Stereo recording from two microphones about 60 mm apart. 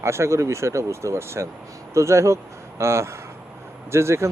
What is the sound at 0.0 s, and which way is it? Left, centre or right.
Speech, right.